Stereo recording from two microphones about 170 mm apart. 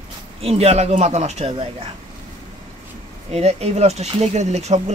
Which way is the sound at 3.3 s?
40° right (ahead or behind).